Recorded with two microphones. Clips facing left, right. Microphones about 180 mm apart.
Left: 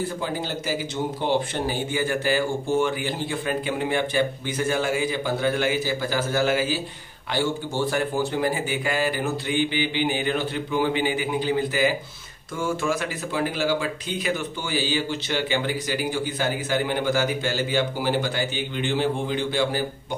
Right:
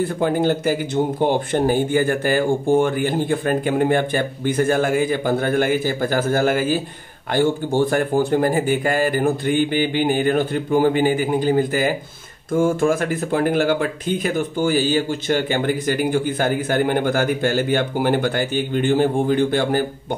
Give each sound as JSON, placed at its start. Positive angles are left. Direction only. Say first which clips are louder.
{"t": 0.2, "sound": "speech", "louder": "right 10 dB", "side_deg": -55}